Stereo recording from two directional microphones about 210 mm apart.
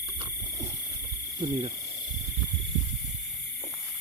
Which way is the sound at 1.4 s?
20° right (ahead or behind).